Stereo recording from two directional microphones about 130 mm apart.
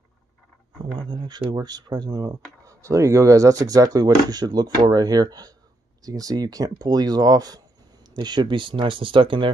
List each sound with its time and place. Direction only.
0.9 s speech: 35° right (ahead or behind)